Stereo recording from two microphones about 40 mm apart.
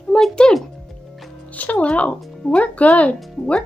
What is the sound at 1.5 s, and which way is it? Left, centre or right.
Speech, left.